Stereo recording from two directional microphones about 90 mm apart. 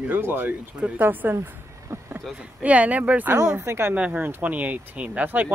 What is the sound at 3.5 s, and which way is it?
Speech, 30° right (ahead or behind).